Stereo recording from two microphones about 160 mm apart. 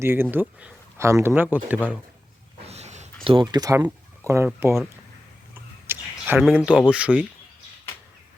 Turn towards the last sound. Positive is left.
turn(degrees=-5)  # may be behind; listen again after turning